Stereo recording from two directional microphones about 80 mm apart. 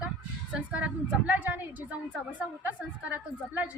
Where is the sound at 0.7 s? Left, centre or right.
Centre.